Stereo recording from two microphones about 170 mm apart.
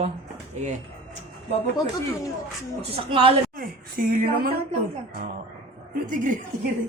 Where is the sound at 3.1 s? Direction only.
35° right (ahead or behind).